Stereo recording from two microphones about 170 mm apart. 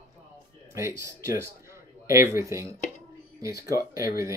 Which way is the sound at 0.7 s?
15° right (ahead or behind).